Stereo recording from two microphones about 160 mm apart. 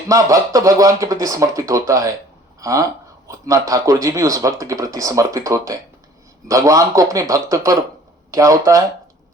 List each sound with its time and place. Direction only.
0.1 s a man's voice: 20° right (ahead or behind)